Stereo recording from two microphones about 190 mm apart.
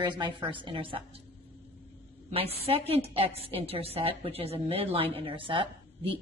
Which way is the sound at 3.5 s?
30° right (ahead or behind).